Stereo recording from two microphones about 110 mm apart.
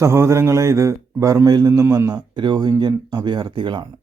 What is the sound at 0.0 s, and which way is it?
Speech, 25° right (ahead or behind).